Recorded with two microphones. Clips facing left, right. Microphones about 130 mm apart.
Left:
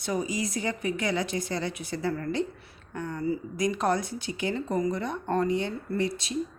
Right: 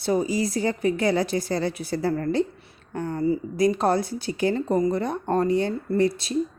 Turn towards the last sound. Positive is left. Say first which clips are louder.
# right 7 dB
turn(degrees=-35)  # may be behind; listen again after turning